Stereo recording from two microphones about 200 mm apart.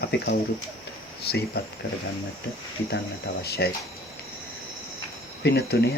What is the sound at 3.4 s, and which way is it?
Speech, 55° left (ahead or behind).